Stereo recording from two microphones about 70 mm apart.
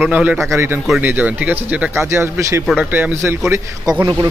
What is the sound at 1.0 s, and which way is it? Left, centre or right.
Speech, right.